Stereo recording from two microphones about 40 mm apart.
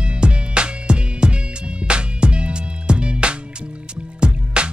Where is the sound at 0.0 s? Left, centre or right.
Right.